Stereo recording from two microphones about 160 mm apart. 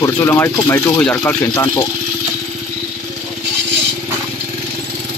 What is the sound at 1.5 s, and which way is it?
Speech, 20° left (ahead or behind).